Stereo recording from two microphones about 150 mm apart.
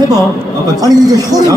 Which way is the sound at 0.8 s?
25° right (ahead or behind).